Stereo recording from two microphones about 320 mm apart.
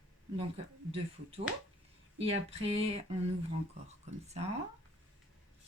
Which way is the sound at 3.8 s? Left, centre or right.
Centre.